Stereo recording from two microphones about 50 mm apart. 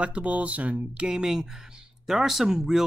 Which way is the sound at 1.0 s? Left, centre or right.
Centre.